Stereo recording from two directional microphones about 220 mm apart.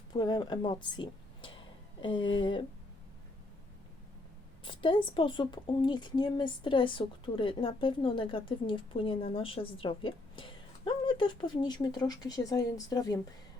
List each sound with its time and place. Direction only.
0.1 s speech: 20° left (ahead or behind)
4.6 s speech: 20° left (ahead or behind)